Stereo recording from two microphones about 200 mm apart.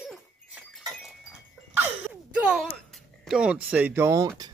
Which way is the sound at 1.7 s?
10° right (ahead or behind).